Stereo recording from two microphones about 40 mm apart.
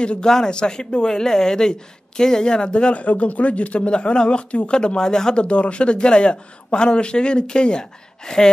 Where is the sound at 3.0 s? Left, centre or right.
Left; by 5.4 s centre.